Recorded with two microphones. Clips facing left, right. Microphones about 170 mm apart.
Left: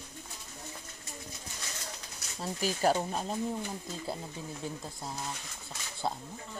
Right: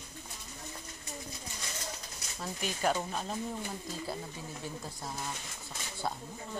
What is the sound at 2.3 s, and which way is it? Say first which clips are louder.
Speech: left 4 dB; 30° left (ahead or behind).